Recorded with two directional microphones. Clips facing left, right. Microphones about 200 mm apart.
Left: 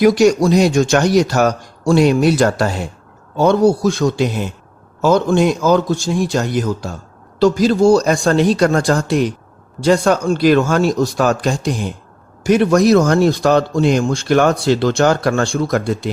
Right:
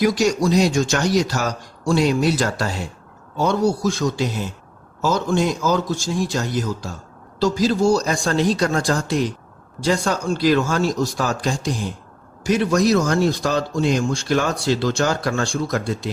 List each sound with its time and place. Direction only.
0.0 s speech: 60° left (ahead or behind)